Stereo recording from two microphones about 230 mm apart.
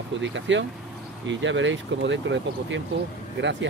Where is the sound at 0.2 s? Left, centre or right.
Right.